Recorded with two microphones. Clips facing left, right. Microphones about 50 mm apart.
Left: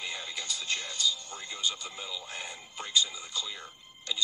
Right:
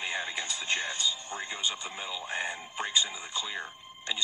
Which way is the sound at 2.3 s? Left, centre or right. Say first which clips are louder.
Right 7 dB; right.